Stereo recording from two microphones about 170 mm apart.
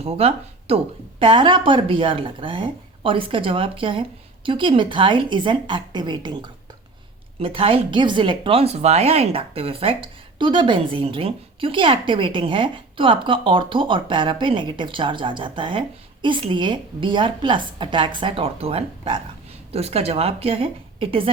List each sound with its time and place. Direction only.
0.0 s speech: 35° right (ahead or behind)